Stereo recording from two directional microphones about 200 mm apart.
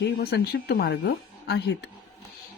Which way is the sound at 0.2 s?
55° left (ahead or behind).